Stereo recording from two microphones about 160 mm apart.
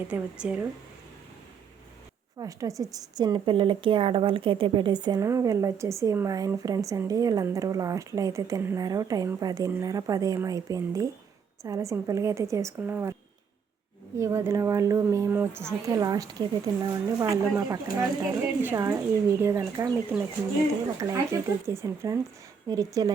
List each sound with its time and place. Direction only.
0.1 s speech: 5° right (ahead or behind)
2.4 s a woman's voice: 20° right (ahead or behind)
14.2 s a woman's voice: 15° right (ahead or behind)